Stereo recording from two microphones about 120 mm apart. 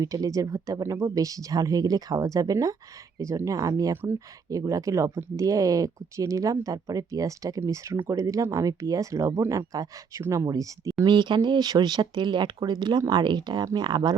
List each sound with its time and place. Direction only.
0.0 s speech: 30° right (ahead or behind)
11.0 s speech: 40° right (ahead or behind)